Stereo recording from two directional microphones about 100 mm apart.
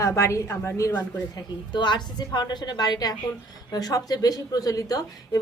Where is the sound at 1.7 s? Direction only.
50° left (ahead or behind).